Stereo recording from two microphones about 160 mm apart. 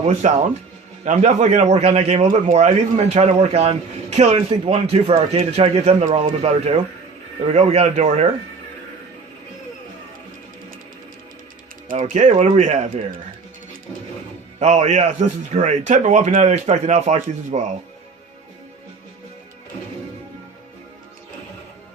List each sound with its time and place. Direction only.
0.2 s a man's voice: 45° right (ahead or behind)
12.0 s a man's voice: 50° right (ahead or behind)
14.6 s a man's voice: 45° right (ahead or behind)